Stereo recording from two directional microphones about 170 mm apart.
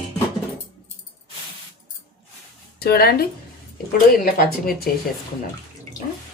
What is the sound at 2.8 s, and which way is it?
Speech, 70° left (ahead or behind).